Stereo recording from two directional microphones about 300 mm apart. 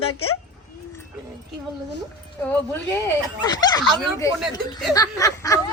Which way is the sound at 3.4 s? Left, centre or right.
Centre.